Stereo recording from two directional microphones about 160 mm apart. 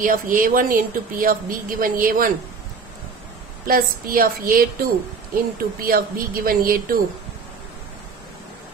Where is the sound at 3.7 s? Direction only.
65° right (ahead or behind).